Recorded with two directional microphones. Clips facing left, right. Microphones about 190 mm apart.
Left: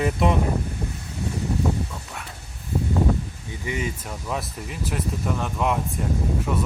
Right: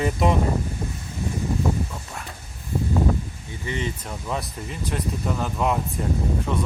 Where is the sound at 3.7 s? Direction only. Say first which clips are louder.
Even; 10° left (ahead or behind).